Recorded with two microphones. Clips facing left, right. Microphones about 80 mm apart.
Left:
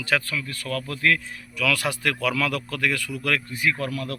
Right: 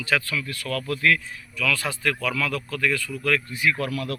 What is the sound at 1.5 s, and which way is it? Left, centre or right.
A man's voice, left.